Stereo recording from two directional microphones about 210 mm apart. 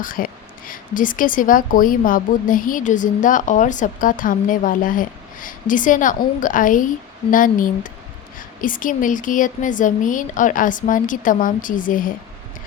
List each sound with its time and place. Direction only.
0.0 s speech: 40° left (ahead or behind)